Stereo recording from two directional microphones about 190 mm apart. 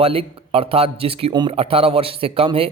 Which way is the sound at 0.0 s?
30° right (ahead or behind).